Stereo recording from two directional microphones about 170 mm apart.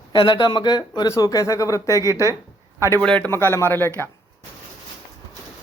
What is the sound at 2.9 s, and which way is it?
A man's voice, 5° left (ahead or behind).